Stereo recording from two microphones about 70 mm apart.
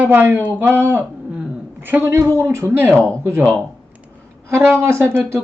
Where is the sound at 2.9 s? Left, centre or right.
Centre.